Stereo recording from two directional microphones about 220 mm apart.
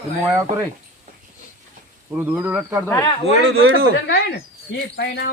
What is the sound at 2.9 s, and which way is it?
Speech, 15° left (ahead or behind).